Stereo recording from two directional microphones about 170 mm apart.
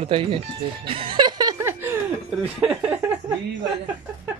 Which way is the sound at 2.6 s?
5° right (ahead or behind).